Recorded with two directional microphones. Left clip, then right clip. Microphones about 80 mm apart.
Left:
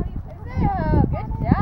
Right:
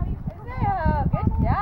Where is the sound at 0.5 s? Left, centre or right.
Left.